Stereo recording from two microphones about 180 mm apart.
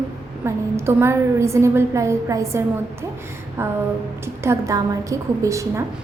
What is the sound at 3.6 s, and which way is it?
A woman's voice, 15° right (ahead or behind).